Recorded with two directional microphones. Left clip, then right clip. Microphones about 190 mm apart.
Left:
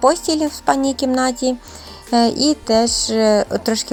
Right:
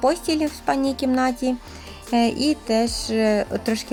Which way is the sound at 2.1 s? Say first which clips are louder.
Left 5 dB; 5° right (ahead or behind).